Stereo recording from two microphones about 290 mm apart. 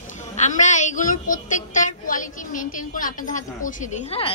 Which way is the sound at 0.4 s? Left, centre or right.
Left.